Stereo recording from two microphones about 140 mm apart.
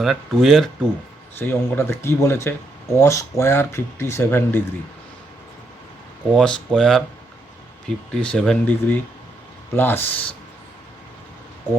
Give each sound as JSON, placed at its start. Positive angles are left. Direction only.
{"t": 0.0, "sound": "speech", "side_deg": 0}
{"t": 1.4, "sound": "speech", "side_deg": 15}
{"t": 6.3, "sound": "speech", "side_deg": 5}